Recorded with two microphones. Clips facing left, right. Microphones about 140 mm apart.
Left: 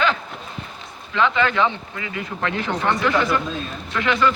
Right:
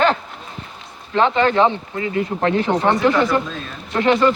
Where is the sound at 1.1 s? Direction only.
40° right (ahead or behind).